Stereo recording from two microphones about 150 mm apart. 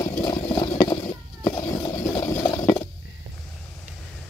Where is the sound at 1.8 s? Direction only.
25° left (ahead or behind).